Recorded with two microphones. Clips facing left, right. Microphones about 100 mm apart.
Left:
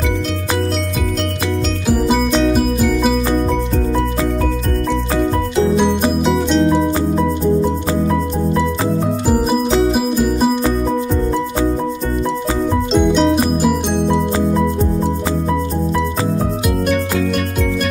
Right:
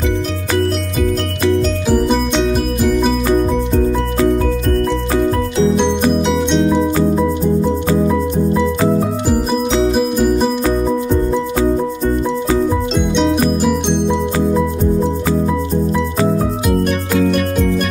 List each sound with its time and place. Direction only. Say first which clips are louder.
1.9 s music: left 1 dB; 5° left (ahead or behind)
5.8 s music: right 1 dB; 5° left (ahead or behind)
9.5 s music: left 1 dB; 5° left (ahead or behind)
12.9 s music: left 5 dB; centre (ahead or behind)